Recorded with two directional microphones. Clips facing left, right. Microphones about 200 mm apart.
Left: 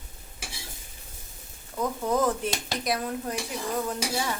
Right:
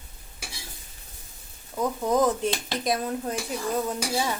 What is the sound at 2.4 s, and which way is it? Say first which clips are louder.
Speech: right 3 dB; 25° right (ahead or behind).